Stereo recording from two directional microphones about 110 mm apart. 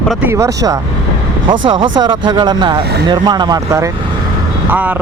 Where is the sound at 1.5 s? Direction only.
45° right (ahead or behind).